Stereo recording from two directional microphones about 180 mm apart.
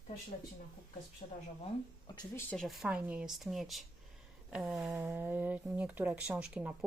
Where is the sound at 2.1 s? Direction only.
15° left (ahead or behind).